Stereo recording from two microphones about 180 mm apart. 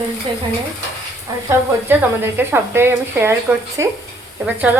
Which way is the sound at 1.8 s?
10° right (ahead or behind).